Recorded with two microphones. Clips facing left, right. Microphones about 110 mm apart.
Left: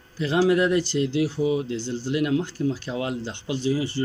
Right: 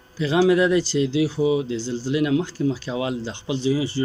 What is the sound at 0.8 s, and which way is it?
Speech, 90° right.